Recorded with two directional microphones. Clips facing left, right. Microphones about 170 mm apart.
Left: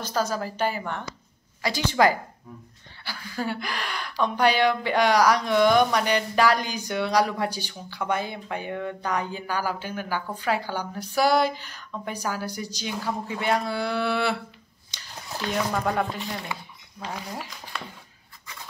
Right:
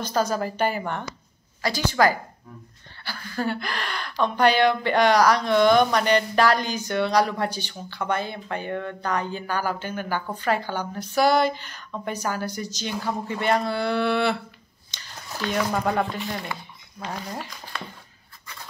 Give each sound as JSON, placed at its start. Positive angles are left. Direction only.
{"t": 0.0, "sound": "speech", "side_deg": 5}
{"t": 0.6, "sound": "speech", "side_deg": -55}
{"t": 1.6, "sound": "a woman's voice", "side_deg": 20}
{"t": 3.0, "sound": "speech", "side_deg": 10}
{"t": 15.7, "sound": "speech", "side_deg": 0}